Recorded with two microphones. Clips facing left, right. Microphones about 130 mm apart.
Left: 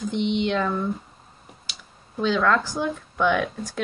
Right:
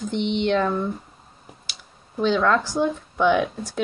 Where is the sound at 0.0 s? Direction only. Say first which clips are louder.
Even; centre (ahead or behind).